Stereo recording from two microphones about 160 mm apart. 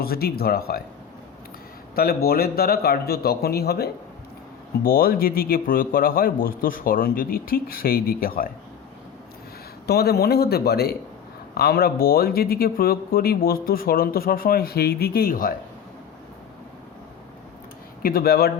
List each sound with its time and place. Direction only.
0.0 s speech: 75° left (ahead or behind)
2.0 s speech: 70° left (ahead or behind)
4.8 s a man's voice: 65° left (ahead or behind)
9.8 s a man's voice: 80° left; by 15.5 s 60° left (ahead or behind)
18.0 s speech: 70° left (ahead or behind)